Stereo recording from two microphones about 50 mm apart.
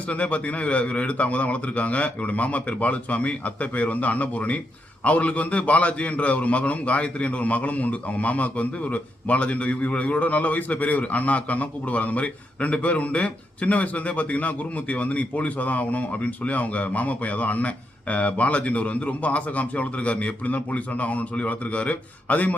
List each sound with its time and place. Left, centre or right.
0.1 s a man's voice: left